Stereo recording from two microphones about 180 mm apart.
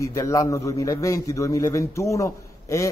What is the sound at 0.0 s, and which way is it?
A man's voice, 15° left (ahead or behind).